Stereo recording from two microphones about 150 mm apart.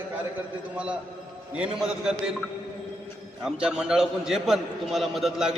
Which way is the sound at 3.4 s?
5° right (ahead or behind).